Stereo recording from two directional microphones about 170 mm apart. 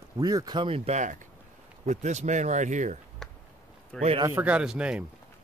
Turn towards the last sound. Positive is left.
turn(degrees=-5)  # may be behind; listen again after turning